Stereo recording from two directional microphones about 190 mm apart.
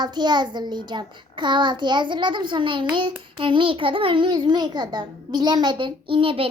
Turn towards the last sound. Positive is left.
turn(degrees=-30)  # may be behind; listen again after turning